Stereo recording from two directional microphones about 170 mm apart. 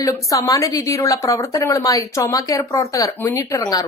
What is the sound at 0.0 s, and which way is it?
A woman's voice, 20° left (ahead or behind).